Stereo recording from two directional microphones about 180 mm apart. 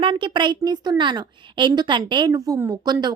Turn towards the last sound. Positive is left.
turn(degrees=-20)  # may be behind; listen again after turning